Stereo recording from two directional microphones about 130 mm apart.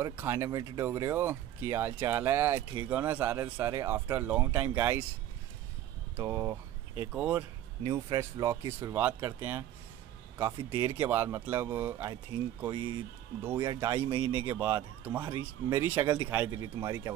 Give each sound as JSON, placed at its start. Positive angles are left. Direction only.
{"t": 0.0, "sound": "speech", "side_deg": -15}
{"t": 6.1, "sound": "speech", "side_deg": -20}
{"t": 7.2, "sound": "speech", "side_deg": -10}
{"t": 7.8, "sound": "speech", "side_deg": -25}
{"t": 10.7, "sound": "speech", "side_deg": -20}
{"t": 12.1, "sound": "speech", "side_deg": -25}
{"t": 12.7, "sound": "speech", "side_deg": -40}
{"t": 13.4, "sound": "speech", "side_deg": -20}
{"t": 14.2, "sound": "speech", "side_deg": 40}
{"t": 14.5, "sound": "speech", "side_deg": -15}